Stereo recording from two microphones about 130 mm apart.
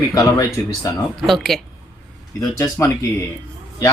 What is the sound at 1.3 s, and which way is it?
Speech, centre (ahead or behind).